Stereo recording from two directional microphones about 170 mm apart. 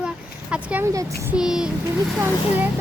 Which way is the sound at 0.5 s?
10° right (ahead or behind).